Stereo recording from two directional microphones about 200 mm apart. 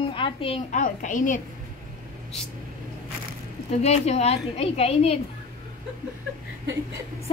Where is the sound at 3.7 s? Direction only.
30° left (ahead or behind).